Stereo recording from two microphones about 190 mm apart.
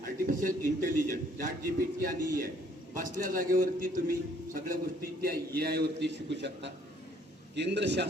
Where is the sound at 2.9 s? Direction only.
45° right (ahead or behind).